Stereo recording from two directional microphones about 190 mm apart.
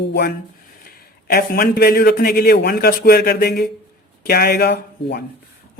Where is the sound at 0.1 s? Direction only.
60° left (ahead or behind).